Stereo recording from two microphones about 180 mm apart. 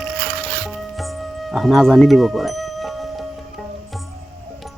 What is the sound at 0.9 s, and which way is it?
Music, centre (ahead or behind).